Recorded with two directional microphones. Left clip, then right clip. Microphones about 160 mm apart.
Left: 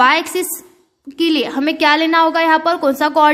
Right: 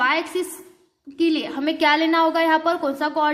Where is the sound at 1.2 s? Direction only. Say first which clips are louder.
Left 6 dB; 40° left (ahead or behind).